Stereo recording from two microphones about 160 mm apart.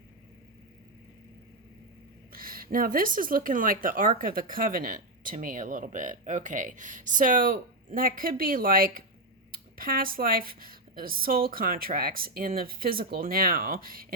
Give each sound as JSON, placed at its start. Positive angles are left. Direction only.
{"t": 2.3, "sound": "speech", "side_deg": -65}